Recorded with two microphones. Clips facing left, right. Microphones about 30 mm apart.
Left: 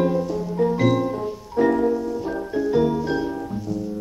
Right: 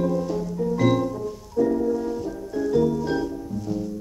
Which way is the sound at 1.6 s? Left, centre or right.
Left.